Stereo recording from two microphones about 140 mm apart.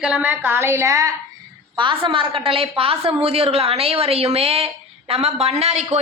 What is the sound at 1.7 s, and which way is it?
A woman's voice, 35° right (ahead or behind).